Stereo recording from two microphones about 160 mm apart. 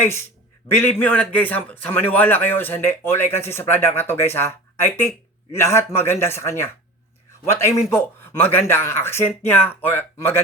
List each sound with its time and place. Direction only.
0.7 s a man's voice: 10° left (ahead or behind)